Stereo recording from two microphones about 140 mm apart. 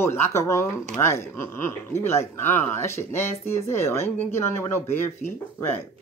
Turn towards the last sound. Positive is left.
turn(degrees=15)  # may be behind; listen again after turning